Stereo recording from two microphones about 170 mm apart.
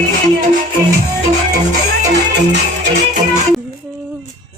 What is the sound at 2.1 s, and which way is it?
Music, 80° right.